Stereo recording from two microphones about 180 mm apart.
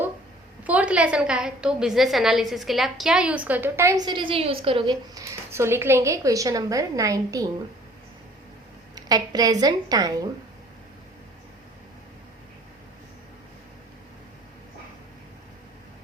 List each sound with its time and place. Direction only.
0.7 s a woman's voice: 5° right (ahead or behind); by 4.9 s 30° right (ahead or behind)
5.1 s a woman's voice: 15° right (ahead or behind)
9.0 s a woman's voice: 20° right (ahead or behind)